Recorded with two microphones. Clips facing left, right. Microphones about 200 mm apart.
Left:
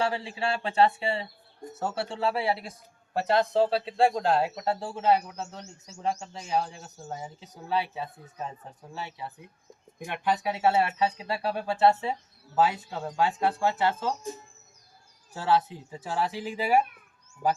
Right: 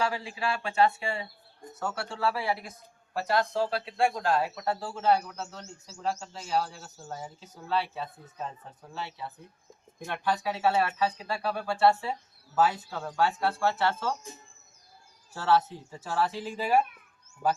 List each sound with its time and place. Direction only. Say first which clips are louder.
0.0 s a man's voice: left 2 dB; 30° left (ahead or behind)
15.3 s speech: even; 15° left (ahead or behind)